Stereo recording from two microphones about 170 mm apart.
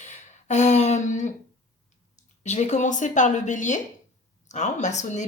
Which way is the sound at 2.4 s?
40° left (ahead or behind).